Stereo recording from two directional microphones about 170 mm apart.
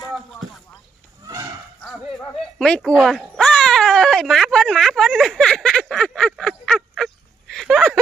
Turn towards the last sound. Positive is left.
turn(degrees=0)  # may be behind; listen again after turning